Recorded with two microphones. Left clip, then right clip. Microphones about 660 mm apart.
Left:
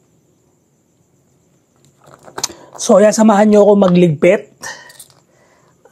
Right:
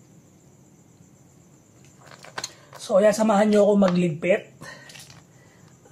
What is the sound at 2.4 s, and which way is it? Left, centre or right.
Speech, left.